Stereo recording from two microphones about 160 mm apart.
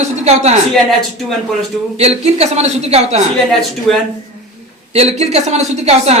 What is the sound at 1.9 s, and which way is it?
A woman's voice, 40° right (ahead or behind).